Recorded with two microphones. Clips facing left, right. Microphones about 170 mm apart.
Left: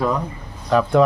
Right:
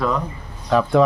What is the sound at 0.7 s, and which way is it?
Speech, centre (ahead or behind).